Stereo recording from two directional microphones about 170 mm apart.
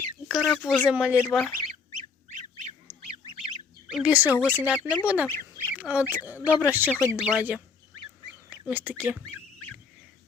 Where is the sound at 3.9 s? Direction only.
5° right (ahead or behind).